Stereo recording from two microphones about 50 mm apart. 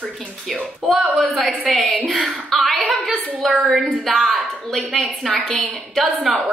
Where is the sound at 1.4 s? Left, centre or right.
Right.